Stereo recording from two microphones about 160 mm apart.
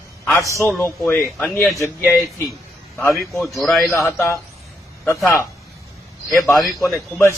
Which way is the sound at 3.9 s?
15° left (ahead or behind).